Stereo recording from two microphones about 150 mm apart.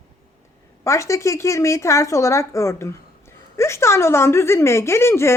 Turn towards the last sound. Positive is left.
turn(degrees=15)  # may be behind; listen again after turning